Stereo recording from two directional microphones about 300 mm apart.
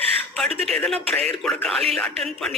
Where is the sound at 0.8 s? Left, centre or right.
Centre.